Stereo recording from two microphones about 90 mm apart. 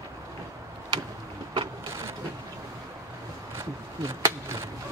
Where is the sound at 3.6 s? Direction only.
35° right (ahead or behind).